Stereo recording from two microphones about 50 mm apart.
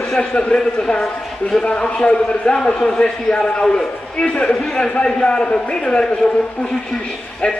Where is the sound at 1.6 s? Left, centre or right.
Left.